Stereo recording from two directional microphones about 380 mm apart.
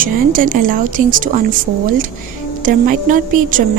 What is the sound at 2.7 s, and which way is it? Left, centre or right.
Speech, right.